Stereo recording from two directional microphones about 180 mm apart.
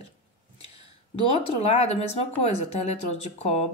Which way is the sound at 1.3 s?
35° left (ahead or behind).